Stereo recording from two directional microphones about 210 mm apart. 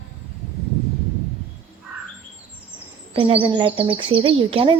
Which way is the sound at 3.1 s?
25° right (ahead or behind).